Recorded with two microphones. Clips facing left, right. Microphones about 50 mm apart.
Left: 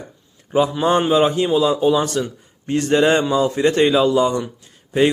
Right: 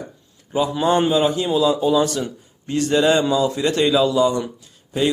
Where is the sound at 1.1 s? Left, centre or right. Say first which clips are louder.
Left 3 dB; left.